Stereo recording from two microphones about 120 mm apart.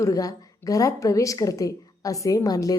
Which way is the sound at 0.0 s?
30° left (ahead or behind).